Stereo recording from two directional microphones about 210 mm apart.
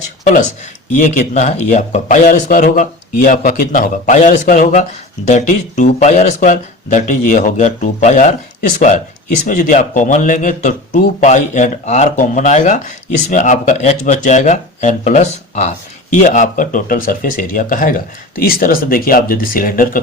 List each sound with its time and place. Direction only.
0.9 s speech: 35° left (ahead or behind)
9.5 s speech: 35° left (ahead or behind)